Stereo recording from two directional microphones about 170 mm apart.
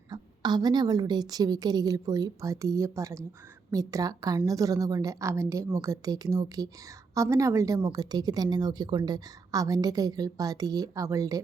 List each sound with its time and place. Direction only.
0.1 s a woman's voice: 25° right (ahead or behind)